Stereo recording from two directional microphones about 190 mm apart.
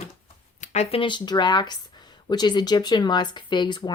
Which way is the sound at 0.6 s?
35° left (ahead or behind).